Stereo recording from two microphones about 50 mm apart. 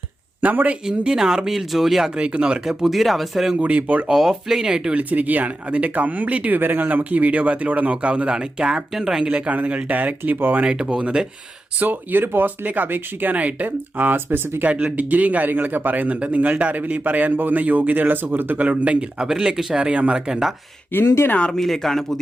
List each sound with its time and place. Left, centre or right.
0.4 s a man's voice: right
0.9 s speech: centre
2.1 s a man's voice: right
2.6 s speech: centre
3.6 s a man's voice: right
4.1 s speech: centre
4.9 s a man's voice: right; by 9.2 s centre
9.5 s a man's voice: right
10.6 s speech: centre
11.8 s a man's voice: right
14.6 s a man's voice: right
20.9 s speech: left
21.5 s speech: centre